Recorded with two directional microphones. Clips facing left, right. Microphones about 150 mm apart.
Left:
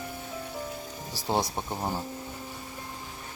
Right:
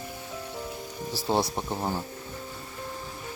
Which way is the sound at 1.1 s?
15° left (ahead or behind).